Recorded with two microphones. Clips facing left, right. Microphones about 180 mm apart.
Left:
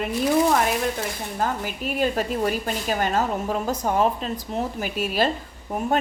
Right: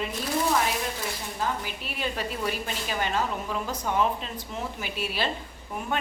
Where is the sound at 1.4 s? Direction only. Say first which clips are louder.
Left 5 dB; 45° left (ahead or behind).